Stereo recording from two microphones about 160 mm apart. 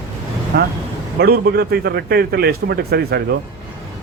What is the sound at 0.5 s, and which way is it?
A man's voice, 80° right.